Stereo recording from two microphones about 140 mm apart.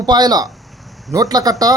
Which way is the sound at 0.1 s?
30° right (ahead or behind).